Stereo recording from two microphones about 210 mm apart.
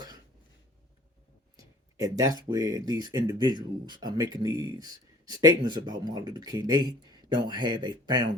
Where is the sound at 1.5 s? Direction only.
15° right (ahead or behind).